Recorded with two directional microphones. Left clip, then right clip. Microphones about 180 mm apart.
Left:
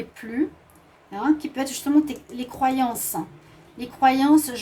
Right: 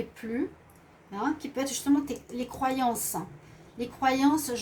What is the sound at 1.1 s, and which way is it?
A woman's voice, 40° left (ahead or behind).